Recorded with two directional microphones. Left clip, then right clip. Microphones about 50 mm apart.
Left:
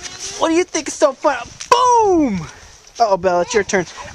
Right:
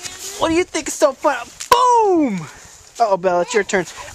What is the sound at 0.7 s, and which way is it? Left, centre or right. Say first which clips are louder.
Speech: left 1 dB; centre.